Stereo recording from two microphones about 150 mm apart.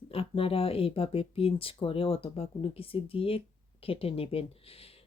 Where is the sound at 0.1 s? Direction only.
40° left (ahead or behind).